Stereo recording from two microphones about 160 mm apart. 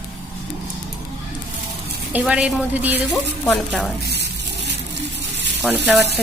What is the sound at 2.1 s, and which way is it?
Speech, 5° right (ahead or behind).